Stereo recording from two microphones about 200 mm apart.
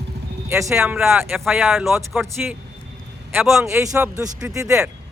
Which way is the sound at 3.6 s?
15° right (ahead or behind).